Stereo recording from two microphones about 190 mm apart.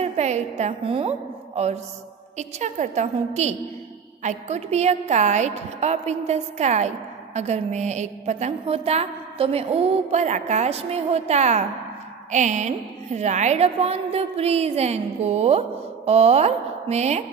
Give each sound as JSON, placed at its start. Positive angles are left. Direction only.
{"t": 0.0, "sound": "a woman's voice", "side_deg": -35}